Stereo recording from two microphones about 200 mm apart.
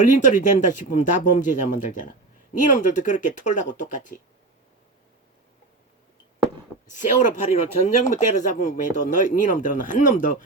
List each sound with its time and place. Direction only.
0.0 s speech: 40° left (ahead or behind)
6.9 s speech: 40° left (ahead or behind)